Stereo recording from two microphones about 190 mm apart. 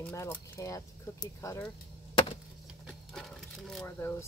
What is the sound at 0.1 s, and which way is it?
Speech, 15° left (ahead or behind).